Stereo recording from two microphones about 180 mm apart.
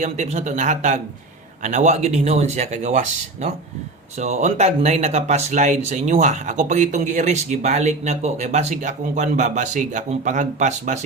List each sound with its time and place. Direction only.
0.0 s speech: 40° right (ahead or behind)